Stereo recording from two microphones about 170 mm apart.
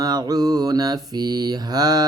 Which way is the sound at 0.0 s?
20° right (ahead or behind).